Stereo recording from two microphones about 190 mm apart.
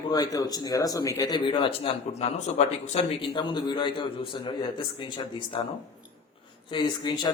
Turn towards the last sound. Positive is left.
turn(degrees=25)  # may be behind; listen again after turning